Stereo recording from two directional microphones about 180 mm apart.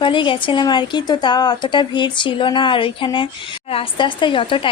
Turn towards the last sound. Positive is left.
turn(degrees=30)  # may be behind; listen again after turning